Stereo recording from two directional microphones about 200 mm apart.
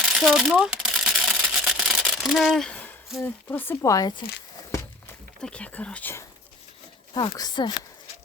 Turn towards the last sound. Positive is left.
turn(degrees=20)  # may be behind; listen again after turning